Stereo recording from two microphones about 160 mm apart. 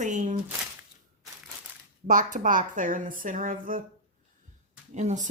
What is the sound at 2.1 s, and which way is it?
Speech, 55° right (ahead or behind).